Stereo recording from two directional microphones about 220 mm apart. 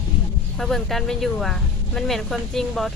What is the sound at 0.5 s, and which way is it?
Speech, centre (ahead or behind).